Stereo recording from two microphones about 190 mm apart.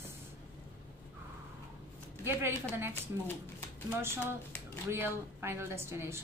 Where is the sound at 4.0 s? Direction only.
10° right (ahead or behind).